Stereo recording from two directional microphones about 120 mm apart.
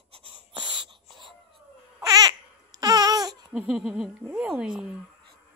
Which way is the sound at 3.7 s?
5° right (ahead or behind).